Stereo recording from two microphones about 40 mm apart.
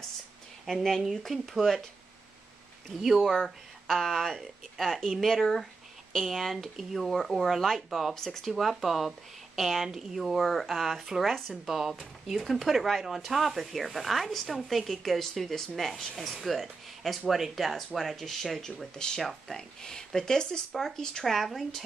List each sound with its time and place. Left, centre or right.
0.7 s speech: centre
1.4 s speech: centre
3.0 s speech: centre
3.3 s speech: centre
8.1 s speech: centre
8.5 s speech: centre
10.4 s speech: centre
10.7 s speech: centre
18.9 s speech: centre
21.3 s speech: centre